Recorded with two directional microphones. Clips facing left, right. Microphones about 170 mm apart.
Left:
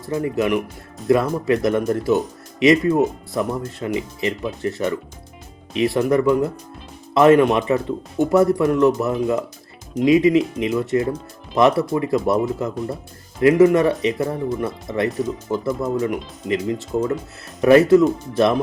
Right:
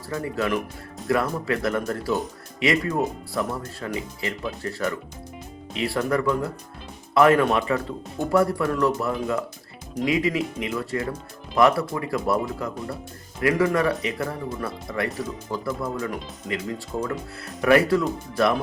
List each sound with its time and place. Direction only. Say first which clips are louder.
0.0 s speech: left 6 dB; 20° left (ahead or behind)